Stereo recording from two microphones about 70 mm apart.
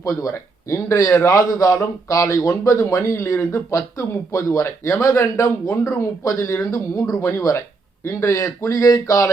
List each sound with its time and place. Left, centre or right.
0.0 s a man's voice: left